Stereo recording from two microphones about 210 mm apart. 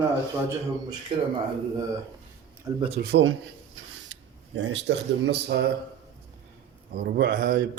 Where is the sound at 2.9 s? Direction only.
55° right (ahead or behind).